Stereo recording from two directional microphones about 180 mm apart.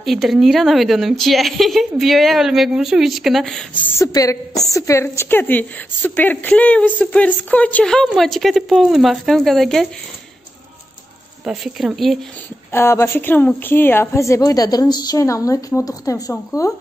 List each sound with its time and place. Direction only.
0.0 s a woman's voice: centre (ahead or behind)
11.4 s a woman's voice: centre (ahead or behind)
12.7 s a woman's voice: 15° left (ahead or behind)